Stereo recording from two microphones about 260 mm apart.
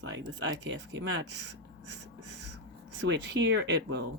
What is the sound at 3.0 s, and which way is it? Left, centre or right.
Speech, right.